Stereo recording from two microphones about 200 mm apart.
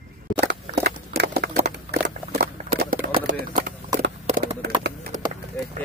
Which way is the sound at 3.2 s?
50° right (ahead or behind).